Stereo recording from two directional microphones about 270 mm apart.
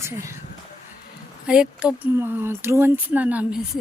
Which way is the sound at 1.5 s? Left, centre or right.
Centre.